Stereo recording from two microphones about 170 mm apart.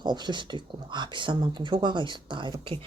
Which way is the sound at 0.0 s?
25° right (ahead or behind).